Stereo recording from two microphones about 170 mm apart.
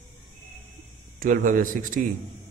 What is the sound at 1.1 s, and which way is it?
Speech, 55° right (ahead or behind).